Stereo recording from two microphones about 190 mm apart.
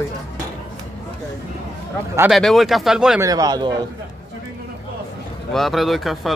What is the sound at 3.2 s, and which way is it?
Speech, 20° right (ahead or behind).